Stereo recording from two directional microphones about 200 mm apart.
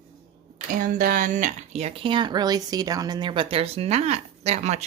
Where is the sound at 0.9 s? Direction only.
45° right (ahead or behind).